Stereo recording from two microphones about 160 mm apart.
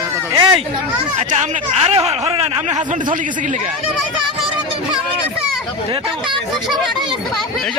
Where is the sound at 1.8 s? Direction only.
35° right (ahead or behind).